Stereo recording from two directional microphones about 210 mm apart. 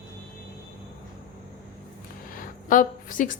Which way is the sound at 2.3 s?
40° left (ahead or behind).